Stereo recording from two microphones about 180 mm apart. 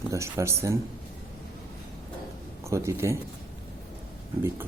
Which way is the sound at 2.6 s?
15° right (ahead or behind).